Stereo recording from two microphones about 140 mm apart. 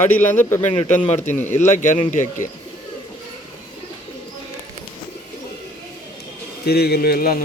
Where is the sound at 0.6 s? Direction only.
60° left (ahead or behind).